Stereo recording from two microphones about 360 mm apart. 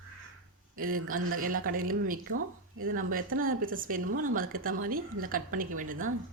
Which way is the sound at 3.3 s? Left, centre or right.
Right.